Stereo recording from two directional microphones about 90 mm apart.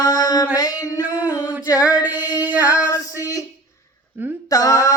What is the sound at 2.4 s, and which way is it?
Female singing, 15° right (ahead or behind).